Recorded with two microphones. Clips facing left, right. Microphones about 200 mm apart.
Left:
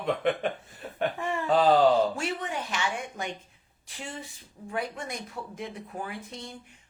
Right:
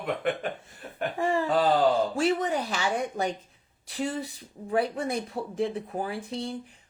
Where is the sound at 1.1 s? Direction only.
30° right (ahead or behind).